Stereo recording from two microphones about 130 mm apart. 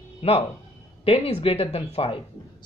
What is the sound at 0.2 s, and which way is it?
Speech, 50° left (ahead or behind).